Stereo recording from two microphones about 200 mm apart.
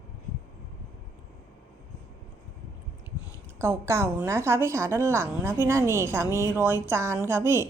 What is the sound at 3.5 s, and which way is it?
A woman's voice, 15° right (ahead or behind).